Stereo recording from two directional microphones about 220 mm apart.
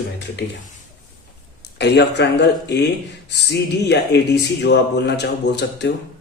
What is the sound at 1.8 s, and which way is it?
Speech, 50° left (ahead or behind).